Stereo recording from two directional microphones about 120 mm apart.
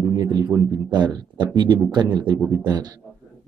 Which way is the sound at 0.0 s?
30° right (ahead or behind).